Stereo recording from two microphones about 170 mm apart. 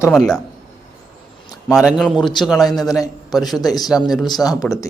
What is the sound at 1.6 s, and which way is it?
A man's voice, 5° right (ahead or behind).